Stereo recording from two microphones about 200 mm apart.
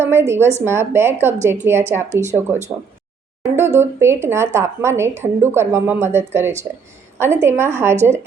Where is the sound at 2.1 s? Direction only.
35° right (ahead or behind).